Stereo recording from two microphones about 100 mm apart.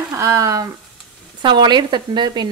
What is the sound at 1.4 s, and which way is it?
Speech, 45° right (ahead or behind).